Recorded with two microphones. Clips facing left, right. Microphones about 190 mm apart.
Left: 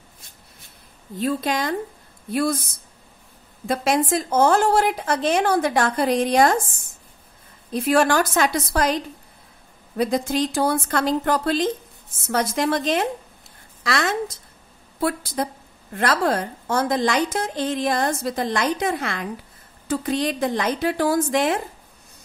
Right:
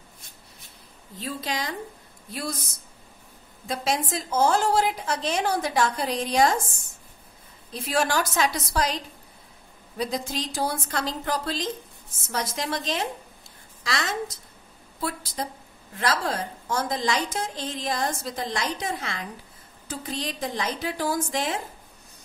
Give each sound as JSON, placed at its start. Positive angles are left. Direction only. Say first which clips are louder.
{"t": 1.2, "sound": "a woman's voice", "louder": "left 8 dB", "side_deg": 55}
{"t": 3.6, "sound": "a woman's voice", "louder": "left 6 dB", "side_deg": 60}
{"t": 7.7, "sound": "a woman's voice", "louder": "left 7 dB", "side_deg": 55}